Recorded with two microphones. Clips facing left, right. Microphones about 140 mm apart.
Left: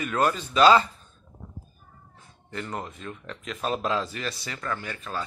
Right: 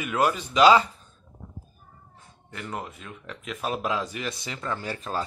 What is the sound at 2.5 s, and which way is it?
Speech, 5° right (ahead or behind).